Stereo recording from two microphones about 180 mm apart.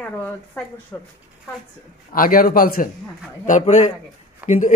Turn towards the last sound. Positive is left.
turn(degrees=45)  # may be behind; listen again after turning